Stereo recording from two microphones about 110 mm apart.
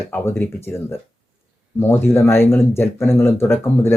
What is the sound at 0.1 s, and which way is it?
Speech, 20° left (ahead or behind).